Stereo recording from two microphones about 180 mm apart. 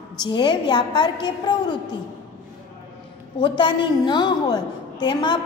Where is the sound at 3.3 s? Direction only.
25° left (ahead or behind).